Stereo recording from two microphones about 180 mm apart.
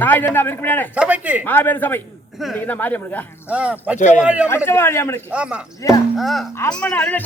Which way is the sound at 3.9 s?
40° left (ahead or behind).